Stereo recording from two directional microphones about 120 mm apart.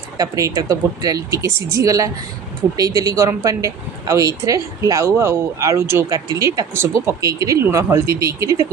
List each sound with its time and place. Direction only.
0.2 s speech: 30° right (ahead or behind)